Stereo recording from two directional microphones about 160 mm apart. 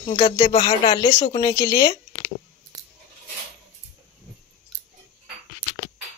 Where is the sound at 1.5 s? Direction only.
20° left (ahead or behind).